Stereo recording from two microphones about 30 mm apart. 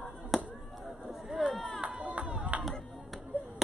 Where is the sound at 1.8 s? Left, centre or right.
Right.